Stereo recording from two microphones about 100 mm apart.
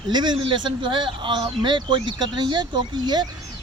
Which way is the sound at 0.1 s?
45° right (ahead or behind).